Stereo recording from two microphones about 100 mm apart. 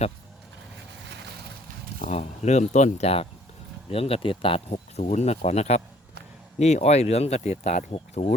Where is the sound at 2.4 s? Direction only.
90° left.